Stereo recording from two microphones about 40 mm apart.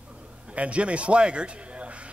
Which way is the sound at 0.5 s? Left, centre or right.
Right.